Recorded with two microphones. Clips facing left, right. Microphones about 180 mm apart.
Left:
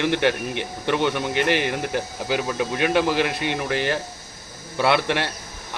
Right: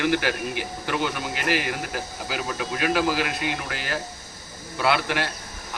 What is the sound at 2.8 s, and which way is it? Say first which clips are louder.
A man's voice: left 3 dB; 25° left (ahead or behind).